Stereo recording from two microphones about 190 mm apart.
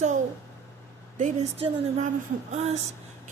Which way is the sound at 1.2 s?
35° right (ahead or behind).